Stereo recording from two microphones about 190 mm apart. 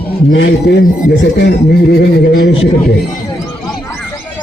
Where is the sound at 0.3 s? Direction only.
60° left (ahead or behind).